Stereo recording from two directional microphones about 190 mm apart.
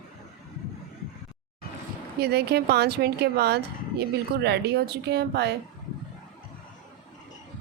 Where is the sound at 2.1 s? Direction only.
60° right (ahead or behind).